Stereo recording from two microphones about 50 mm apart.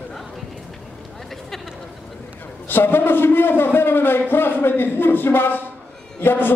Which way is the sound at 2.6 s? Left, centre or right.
Left.